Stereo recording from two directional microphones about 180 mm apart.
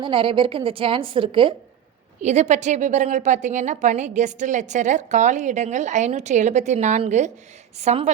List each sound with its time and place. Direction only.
0.0 s a woman's voice: 30° right (ahead or behind)
2.2 s a woman's voice: 40° right (ahead or behind)